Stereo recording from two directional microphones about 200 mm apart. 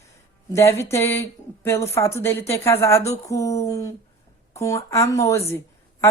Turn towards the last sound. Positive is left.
turn(degrees=15)  # may be behind; listen again after turning